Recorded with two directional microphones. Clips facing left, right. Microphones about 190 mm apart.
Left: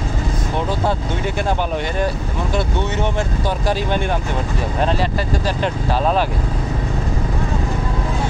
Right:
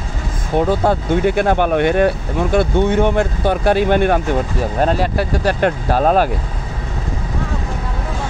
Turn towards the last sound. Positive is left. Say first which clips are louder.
# right 4 dB
turn(degrees=-50)  # may be behind; listen again after turning